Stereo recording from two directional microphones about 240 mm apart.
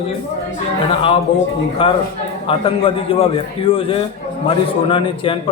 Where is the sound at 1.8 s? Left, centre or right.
Left.